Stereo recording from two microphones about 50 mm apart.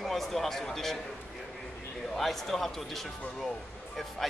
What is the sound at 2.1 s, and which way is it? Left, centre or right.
Speech, centre.